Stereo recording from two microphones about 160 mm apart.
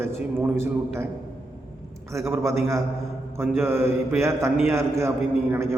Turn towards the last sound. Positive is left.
turn(degrees=-15)  # may be behind; listen again after turning